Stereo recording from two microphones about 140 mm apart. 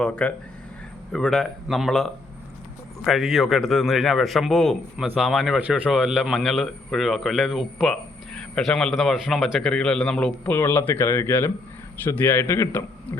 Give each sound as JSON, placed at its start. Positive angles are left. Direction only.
{"t": 0.0, "sound": "a man's voice", "side_deg": 10}